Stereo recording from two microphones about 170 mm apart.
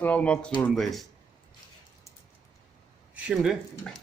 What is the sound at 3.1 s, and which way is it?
Speech, 5° right (ahead or behind).